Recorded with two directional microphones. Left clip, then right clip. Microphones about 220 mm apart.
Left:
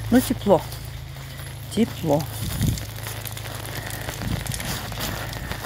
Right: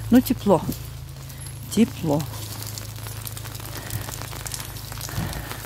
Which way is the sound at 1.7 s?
30° right (ahead or behind).